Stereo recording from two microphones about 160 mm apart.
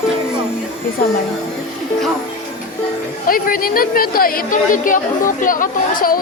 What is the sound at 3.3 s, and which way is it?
A woman's voice, 60° left (ahead or behind).